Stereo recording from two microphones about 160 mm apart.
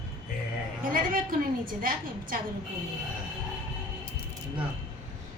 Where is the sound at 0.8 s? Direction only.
60° right (ahead or behind).